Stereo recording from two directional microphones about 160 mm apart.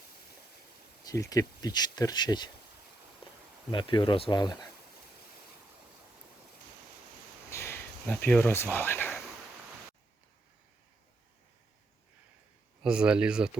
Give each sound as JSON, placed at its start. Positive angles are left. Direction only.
{"t": 1.0, "sound": "speech", "side_deg": 20}
{"t": 3.7, "sound": "speech", "side_deg": 30}
{"t": 7.5, "sound": "a sound", "side_deg": 15}
{"t": 12.8, "sound": "speech", "side_deg": -5}